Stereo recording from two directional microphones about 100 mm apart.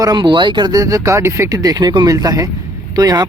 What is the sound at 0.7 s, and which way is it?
Speech, 35° right (ahead or behind).